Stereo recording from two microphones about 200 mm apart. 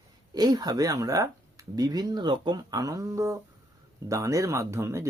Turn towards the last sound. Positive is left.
turn(degrees=-15)  # may be behind; listen again after turning